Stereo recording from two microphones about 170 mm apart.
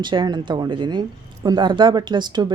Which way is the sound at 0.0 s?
25° right (ahead or behind).